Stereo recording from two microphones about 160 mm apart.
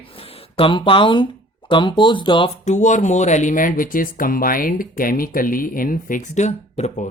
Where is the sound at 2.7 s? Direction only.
50° left (ahead or behind).